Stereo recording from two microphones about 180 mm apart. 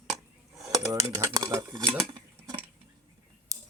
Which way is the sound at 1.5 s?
25° right (ahead or behind).